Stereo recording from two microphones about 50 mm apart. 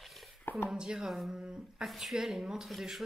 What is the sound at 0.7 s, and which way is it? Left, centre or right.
Speech, centre.